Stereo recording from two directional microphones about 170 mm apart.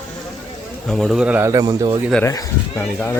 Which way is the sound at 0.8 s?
Centre (ahead or behind).